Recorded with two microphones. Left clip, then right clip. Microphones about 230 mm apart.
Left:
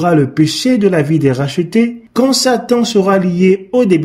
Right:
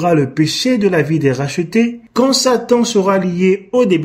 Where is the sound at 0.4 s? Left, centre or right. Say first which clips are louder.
Left 2 dB; left.